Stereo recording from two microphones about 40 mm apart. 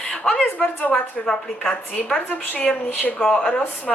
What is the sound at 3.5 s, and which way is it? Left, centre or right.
Speech, left.